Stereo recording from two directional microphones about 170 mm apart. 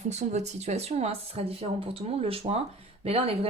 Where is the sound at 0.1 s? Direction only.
40° right (ahead or behind).